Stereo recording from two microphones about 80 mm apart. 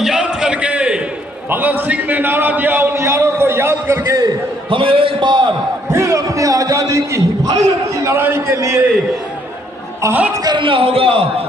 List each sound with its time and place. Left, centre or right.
0.0 s a sound: centre
1.5 s a man's voice: right
2.9 s a man's voice: right
4.7 s a man's voice: right
5.9 s a man's voice: right
8.5 s a man's voice: right
10.4 s a man's voice: right